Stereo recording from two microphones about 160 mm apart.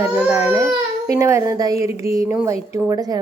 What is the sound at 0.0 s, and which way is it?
A child's voice, 10° right (ahead or behind).